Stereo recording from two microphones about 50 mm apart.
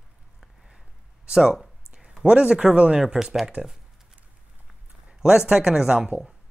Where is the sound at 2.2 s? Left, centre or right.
Centre.